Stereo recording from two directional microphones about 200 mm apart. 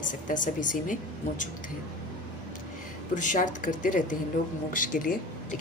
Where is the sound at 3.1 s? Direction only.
40° left (ahead or behind).